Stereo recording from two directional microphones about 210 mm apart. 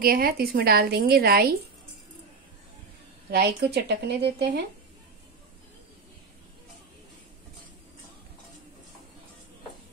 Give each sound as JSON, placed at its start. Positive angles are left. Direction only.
{"t": 0.0, "sound": "a woman's voice", "side_deg": -45}
{"t": 3.3, "sound": "a woman's voice", "side_deg": -50}